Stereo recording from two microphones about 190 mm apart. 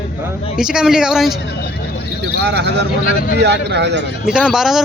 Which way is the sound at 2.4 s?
60° right (ahead or behind).